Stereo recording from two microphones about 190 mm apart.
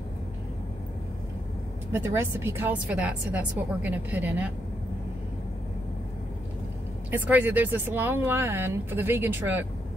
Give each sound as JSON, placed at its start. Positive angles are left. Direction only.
{"t": 1.9, "sound": "speech", "side_deg": -15}
{"t": 7.1, "sound": "speech", "side_deg": -10}